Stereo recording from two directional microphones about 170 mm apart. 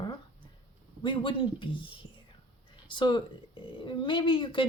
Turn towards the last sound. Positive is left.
turn(degrees=30)  # may be behind; listen again after turning